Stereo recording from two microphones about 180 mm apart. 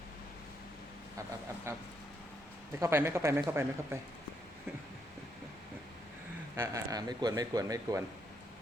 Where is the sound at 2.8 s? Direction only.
15° right (ahead or behind).